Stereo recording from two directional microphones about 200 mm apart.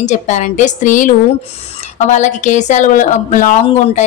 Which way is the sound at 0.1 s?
35° left (ahead or behind).